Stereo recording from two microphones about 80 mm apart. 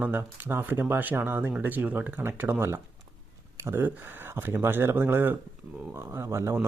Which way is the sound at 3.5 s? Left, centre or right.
Right.